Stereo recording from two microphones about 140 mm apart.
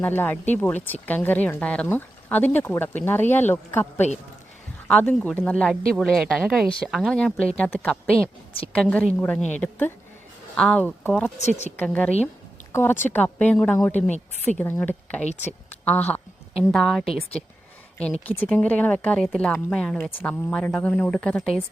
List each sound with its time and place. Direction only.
0.0 s speech: 15° left (ahead or behind)
11.3 s speech: 50° left (ahead or behind)
11.8 s a woman's voice: 10° left (ahead or behind)